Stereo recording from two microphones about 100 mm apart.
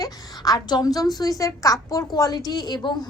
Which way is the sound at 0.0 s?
40° left (ahead or behind).